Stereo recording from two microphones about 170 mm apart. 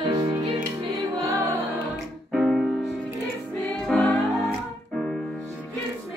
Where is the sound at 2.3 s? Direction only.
Centre (ahead or behind).